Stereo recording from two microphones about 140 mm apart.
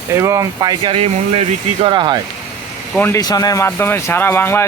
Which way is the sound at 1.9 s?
35° right (ahead or behind).